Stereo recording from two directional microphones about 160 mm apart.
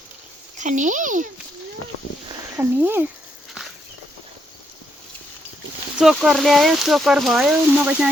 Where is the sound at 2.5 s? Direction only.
15° right (ahead or behind).